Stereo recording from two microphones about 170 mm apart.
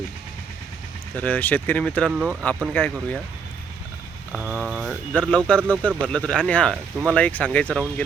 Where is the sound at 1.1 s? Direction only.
10° left (ahead or behind).